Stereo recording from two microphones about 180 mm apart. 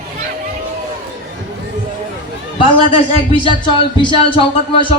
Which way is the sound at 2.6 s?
30° left (ahead or behind).